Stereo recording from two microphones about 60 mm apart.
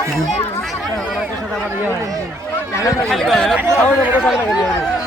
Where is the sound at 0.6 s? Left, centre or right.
Centre.